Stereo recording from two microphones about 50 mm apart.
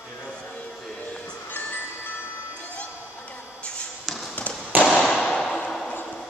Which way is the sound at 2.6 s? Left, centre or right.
Left.